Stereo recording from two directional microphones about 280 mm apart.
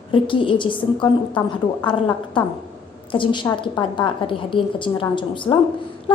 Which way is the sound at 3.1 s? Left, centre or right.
Centre.